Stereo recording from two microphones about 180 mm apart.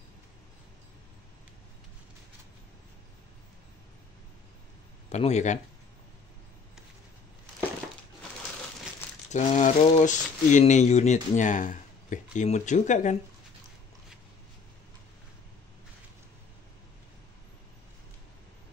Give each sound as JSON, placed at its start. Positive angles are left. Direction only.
{"t": 5.1, "sound": "speech", "side_deg": 40}
{"t": 9.3, "sound": "speech", "side_deg": 40}